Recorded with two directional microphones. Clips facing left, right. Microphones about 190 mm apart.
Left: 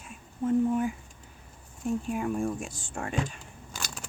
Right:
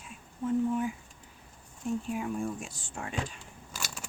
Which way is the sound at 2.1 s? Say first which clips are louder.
Left 4 dB; 50° left (ahead or behind).